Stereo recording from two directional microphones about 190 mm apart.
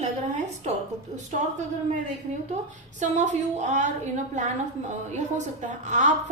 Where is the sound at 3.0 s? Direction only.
40° right (ahead or behind).